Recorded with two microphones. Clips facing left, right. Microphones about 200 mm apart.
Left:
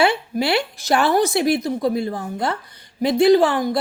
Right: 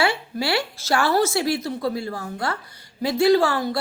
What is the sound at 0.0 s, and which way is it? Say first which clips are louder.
Speech: left 4 dB; 20° left (ahead or behind).